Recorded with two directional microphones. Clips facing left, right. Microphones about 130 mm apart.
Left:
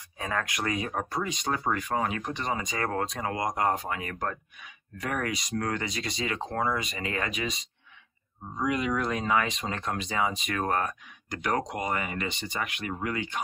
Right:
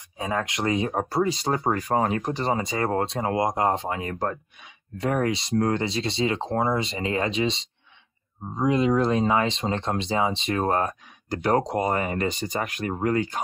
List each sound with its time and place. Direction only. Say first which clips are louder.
0.2 s speech: right 4 dB; 25° right (ahead or behind); by 13.4 s 40° right (ahead or behind)